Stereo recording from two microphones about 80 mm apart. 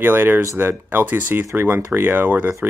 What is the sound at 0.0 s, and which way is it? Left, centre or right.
Speech, right.